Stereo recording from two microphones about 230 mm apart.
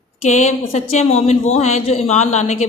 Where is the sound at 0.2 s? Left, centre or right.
Left.